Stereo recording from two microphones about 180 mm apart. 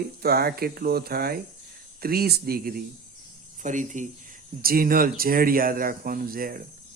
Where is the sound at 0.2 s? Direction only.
60° right (ahead or behind).